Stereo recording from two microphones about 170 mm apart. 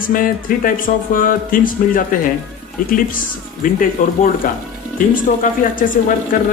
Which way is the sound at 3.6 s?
55° left (ahead or behind).